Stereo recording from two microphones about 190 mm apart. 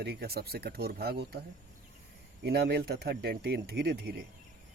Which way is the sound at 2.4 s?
60° right (ahead or behind).